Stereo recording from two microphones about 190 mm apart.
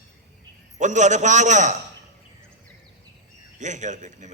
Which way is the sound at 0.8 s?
40° right (ahead or behind).